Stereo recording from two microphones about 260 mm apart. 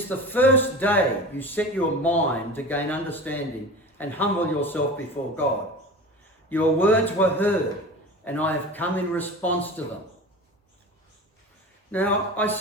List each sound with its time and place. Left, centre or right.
0.1 s speech: centre
5.2 s speech: left
6.5 s speech: centre
11.9 s speech: centre